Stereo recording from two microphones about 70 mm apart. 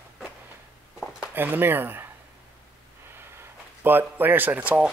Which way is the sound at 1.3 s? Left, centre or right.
Right.